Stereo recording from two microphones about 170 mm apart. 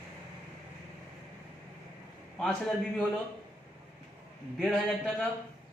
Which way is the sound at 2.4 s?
5° left (ahead or behind).